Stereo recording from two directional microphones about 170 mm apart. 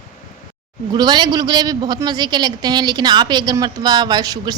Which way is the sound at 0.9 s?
25° right (ahead or behind).